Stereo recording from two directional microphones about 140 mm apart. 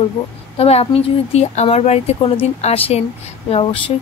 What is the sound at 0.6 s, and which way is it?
Speech, 45° left (ahead or behind).